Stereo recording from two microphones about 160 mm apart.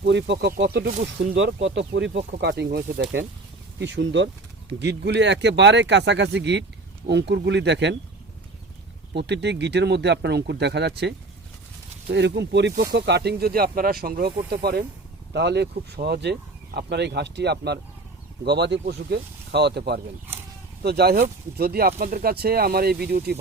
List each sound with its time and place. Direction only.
0.0 s speech: 90° right
9.1 s speech: 90° right
15.3 s speech: 90° right; by 21.9 s 75° right (ahead or behind)
21.9 s speech: 65° right (ahead or behind); by 23.4 s 80° right